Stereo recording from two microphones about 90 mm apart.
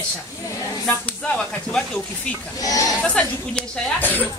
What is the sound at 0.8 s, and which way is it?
A woman's voice, 15° left (ahead or behind).